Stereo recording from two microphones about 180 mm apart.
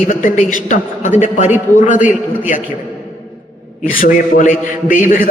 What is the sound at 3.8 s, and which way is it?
A man's voice, 50° left (ahead or behind).